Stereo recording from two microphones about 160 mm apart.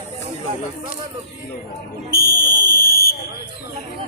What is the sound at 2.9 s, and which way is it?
Fire alarm, 70° left (ahead or behind).